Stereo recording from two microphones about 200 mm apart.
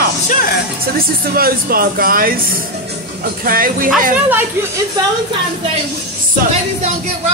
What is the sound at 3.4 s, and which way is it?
Speech, 45° right (ahead or behind).